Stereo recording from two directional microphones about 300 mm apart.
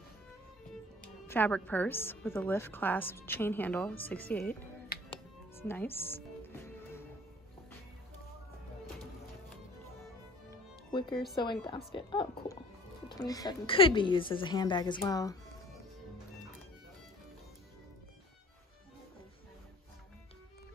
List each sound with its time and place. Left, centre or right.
1.2 s a woman's voice: centre
4.9 s music: left
5.6 s music: centre
10.5 s music: centre
11.9 s a woman's voice: centre